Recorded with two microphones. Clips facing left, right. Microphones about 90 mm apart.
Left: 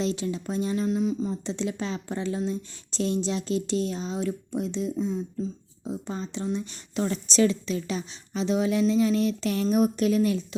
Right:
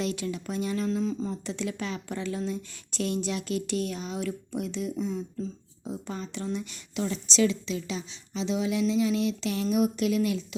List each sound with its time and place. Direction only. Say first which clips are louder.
0.0 s speech: left 3 dB; 30° left (ahead or behind)
0.9 s speech: left 3 dB; 15° left (ahead or behind)
1.5 s speech: left 3 dB; 25° left (ahead or behind)
6.9 s a woman's voice: left 3 dB; 45° left (ahead or behind)